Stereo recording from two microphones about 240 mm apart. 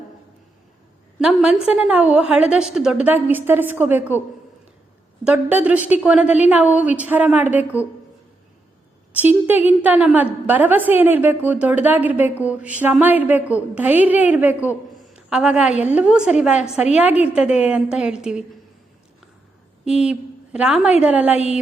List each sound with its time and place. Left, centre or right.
1.2 s a woman's voice: centre
5.2 s a woman's voice: centre
9.1 s a woman's voice: centre
19.8 s a woman's voice: centre
21.3 s a sound: left